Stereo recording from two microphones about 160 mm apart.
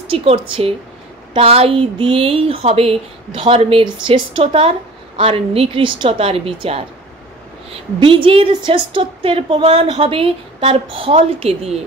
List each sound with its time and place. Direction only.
0.1 s a woman's voice: 35° right (ahead or behind)
8.0 s a woman's voice: 35° right (ahead or behind)